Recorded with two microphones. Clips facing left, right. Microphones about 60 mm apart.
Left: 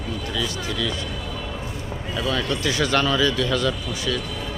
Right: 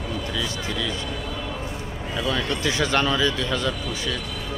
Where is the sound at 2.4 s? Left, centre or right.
Right.